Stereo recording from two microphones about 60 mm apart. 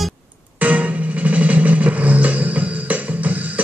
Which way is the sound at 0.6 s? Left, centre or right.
Right.